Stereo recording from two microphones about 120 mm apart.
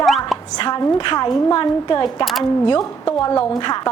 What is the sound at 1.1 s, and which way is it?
A woman's voice, 35° left (ahead or behind).